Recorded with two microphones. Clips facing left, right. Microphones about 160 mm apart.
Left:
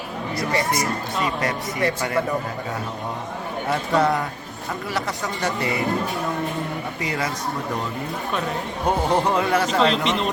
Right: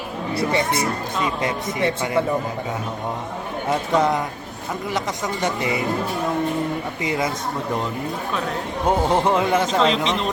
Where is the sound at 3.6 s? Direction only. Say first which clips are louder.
Right 1 dB; 20° right (ahead or behind).